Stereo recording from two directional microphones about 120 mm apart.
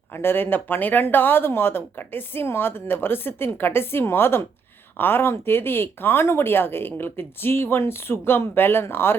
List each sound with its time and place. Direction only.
0.1 s speech: 20° left (ahead or behind)